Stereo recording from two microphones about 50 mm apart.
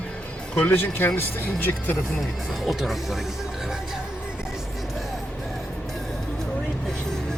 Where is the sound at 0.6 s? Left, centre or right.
Left.